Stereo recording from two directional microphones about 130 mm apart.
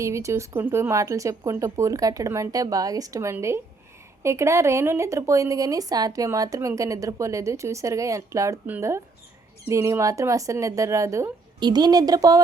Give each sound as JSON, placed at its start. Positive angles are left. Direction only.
{"t": 0.0, "sound": "speech", "side_deg": -25}